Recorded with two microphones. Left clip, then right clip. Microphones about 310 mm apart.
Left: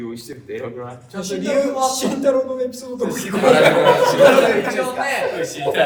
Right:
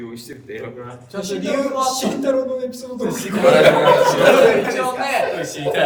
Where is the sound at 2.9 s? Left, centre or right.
Centre.